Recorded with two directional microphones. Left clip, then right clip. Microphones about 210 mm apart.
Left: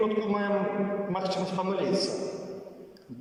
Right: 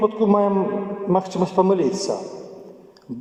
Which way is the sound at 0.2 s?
55° right (ahead or behind).